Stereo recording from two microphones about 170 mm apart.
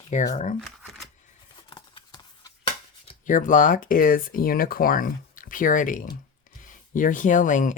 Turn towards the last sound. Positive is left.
turn(degrees=50)  # may be behind; listen again after turning